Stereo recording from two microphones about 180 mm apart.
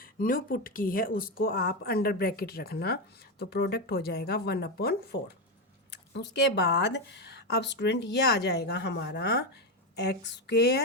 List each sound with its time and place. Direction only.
0.0 s a woman's voice: 50° left (ahead or behind)